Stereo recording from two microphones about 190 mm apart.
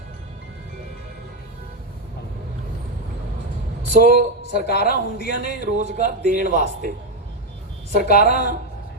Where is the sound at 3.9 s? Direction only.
45° right (ahead or behind).